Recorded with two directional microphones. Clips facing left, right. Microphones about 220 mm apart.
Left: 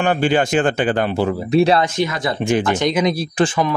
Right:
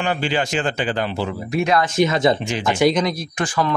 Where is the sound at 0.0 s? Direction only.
50° left (ahead or behind).